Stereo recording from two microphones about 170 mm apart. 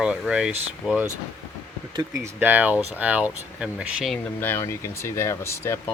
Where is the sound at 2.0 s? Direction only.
15° right (ahead or behind).